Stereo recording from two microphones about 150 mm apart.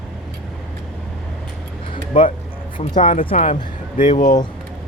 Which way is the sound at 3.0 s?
35° left (ahead or behind).